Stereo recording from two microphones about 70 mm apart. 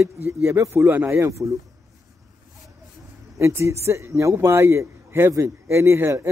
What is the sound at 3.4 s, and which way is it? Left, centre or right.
A man's voice, right.